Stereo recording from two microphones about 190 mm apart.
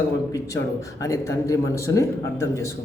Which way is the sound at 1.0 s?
15° left (ahead or behind).